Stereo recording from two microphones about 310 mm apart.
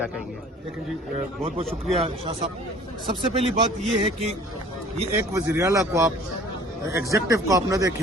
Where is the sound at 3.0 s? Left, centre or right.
Centre.